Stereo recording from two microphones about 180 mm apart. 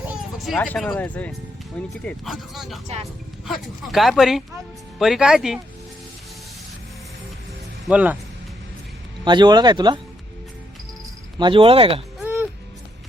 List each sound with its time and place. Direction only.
0.1 s a child's voice: centre (ahead or behind)
2.8 s speech: 35° right (ahead or behind)
3.4 s speech: centre (ahead or behind)
7.9 s speech: 10° right (ahead or behind)
9.2 s speech: 25° right (ahead or behind)
11.3 s speech: 25° right (ahead or behind)
12.2 s music: 10° right (ahead or behind)